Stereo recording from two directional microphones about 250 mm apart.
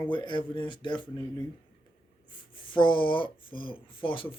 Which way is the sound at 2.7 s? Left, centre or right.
Centre.